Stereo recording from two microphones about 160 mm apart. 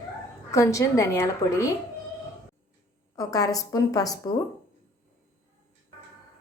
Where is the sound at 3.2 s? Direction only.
25° left (ahead or behind).